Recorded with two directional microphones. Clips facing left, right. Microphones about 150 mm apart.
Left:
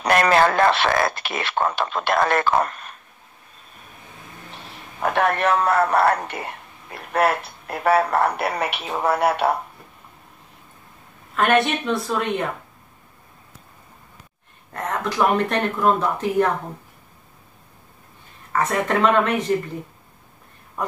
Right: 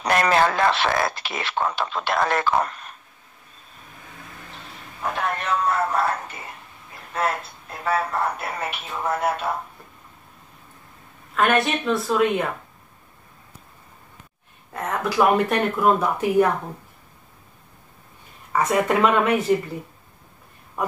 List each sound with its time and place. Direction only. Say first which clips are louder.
0.0 s speech: left 2 dB; 65° left (ahead or behind)
5.1 s speech: left 6 dB; 70° left (ahead or behind)
11.3 s a woman's voice: left 1 dB; centre (ahead or behind)
14.7 s speech: even; 10° right (ahead or behind)
18.5 s speech: right 1 dB; 10° right (ahead or behind)